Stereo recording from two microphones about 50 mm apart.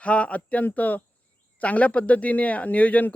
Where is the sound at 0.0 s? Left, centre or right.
Left.